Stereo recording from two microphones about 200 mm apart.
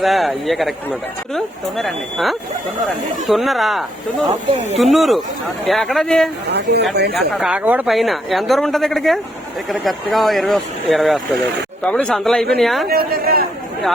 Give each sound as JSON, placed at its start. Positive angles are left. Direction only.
{"t": 0.0, "sound": "speech", "side_deg": 0}
{"t": 4.3, "sound": "speech", "side_deg": -35}
{"t": 4.8, "sound": "speech", "side_deg": 0}
{"t": 6.5, "sound": "speech", "side_deg": -55}
{"t": 7.2, "sound": "speech", "side_deg": -5}
{"t": 12.9, "sound": "a man's voice", "side_deg": -50}